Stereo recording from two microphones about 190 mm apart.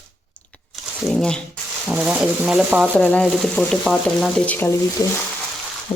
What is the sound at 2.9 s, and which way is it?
Speech, 5° left (ahead or behind).